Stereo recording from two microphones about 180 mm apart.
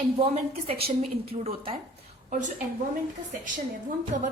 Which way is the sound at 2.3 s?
45° right (ahead or behind).